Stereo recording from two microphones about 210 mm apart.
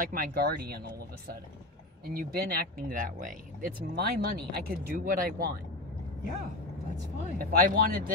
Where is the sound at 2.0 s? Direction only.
45° right (ahead or behind).